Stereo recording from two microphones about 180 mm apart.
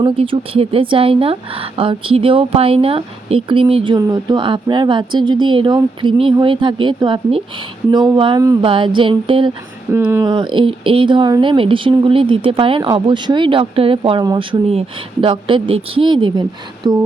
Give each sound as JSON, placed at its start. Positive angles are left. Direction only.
{"t": 0.0, "sound": "speech", "side_deg": -30}
{"t": 9.9, "sound": "speech", "side_deg": -15}
{"t": 10.2, "sound": "speech", "side_deg": -25}